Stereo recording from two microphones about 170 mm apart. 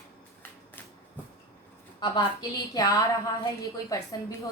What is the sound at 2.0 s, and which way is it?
A woman's voice, 25° left (ahead or behind).